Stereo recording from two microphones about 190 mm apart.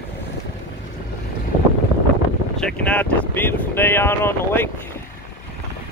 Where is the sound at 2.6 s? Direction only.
5° left (ahead or behind).